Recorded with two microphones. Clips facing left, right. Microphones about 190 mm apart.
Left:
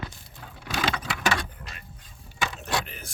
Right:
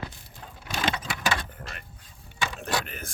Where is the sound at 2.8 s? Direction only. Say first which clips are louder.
Right 3 dB; 50° right (ahead or behind).